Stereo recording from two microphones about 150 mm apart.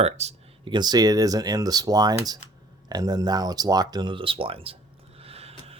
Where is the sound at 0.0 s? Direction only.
45° right (ahead or behind).